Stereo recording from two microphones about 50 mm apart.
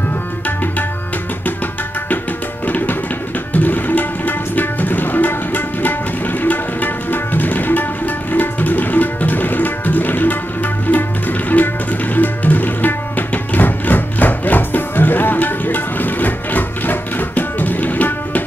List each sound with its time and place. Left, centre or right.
2.6 s music: left
3.5 s tabla: left